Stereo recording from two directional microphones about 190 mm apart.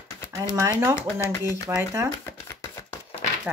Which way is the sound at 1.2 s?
20° left (ahead or behind).